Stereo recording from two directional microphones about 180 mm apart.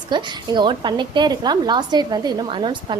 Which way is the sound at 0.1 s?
25° right (ahead or behind).